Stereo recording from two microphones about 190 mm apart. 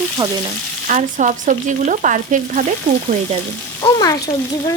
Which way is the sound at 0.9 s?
40° right (ahead or behind).